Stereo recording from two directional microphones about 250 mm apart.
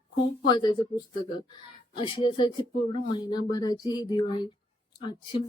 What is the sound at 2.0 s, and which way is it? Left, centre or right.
A woman's voice, centre.